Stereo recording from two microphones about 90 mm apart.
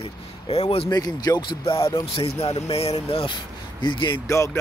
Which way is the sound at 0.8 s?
45° left (ahead or behind).